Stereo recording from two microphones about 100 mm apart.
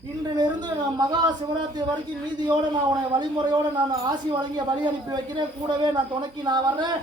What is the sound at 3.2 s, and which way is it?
A man's voice, 45° right (ahead or behind).